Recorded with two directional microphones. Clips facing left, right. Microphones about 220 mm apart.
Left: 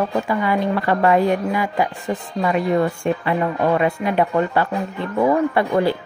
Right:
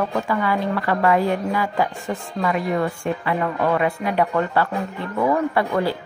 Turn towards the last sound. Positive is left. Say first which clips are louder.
# left 3 dB
turn(degrees=20)  # may be behind; listen again after turning